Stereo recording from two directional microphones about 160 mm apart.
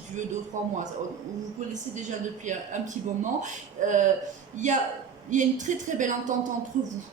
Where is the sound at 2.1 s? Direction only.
50° right (ahead or behind).